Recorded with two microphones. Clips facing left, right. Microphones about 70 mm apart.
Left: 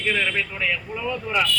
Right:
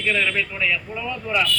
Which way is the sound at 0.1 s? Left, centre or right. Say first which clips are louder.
Right 2 dB; centre.